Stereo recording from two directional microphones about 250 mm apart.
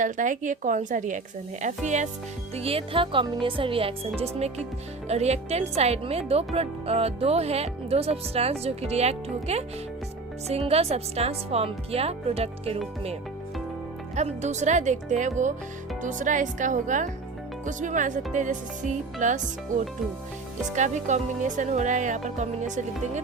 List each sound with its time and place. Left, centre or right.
0.0 s a woman's voice: right
10.7 s speech: right
14.2 s a woman's voice: right